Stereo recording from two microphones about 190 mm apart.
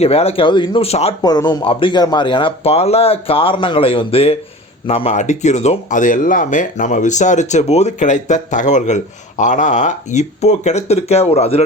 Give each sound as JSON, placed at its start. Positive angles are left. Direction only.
{"t": 0.0, "sound": "speech", "side_deg": 30}
{"t": 1.2, "sound": "speech", "side_deg": 20}